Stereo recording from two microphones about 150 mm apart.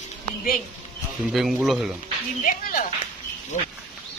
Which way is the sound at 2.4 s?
60° left (ahead or behind).